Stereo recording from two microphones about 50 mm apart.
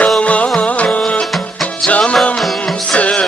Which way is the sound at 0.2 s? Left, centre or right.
Left.